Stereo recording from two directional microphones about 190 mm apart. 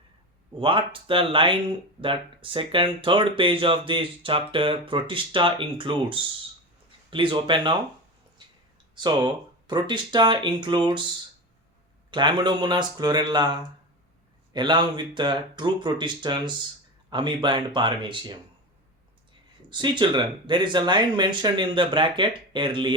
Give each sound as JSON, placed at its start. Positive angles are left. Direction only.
{"t": 0.6, "sound": "speech", "side_deg": -25}
{"t": 8.4, "sound": "clicking", "side_deg": -25}
{"t": 9.0, "sound": "speech", "side_deg": -20}
{"t": 12.1, "sound": "speech", "side_deg": -25}
{"t": 19.7, "sound": "speech", "side_deg": -25}